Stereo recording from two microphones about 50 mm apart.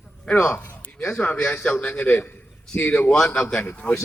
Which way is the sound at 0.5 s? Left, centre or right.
Left.